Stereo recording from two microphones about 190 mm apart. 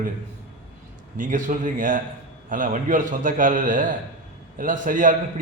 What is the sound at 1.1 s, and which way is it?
A man's voice, 45° right (ahead or behind).